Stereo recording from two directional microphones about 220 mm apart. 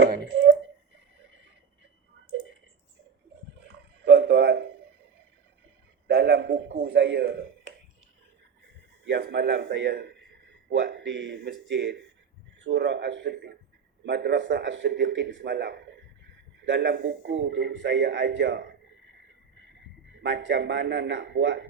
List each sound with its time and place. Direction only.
4.0 s a sound: 55° right (ahead or behind)
6.1 s a man's voice: 55° right (ahead or behind)
9.0 s a man's voice: 50° right (ahead or behind)
20.2 s speech: 55° right (ahead or behind)